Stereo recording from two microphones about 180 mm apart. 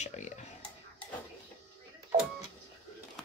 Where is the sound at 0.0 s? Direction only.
40° left (ahead or behind).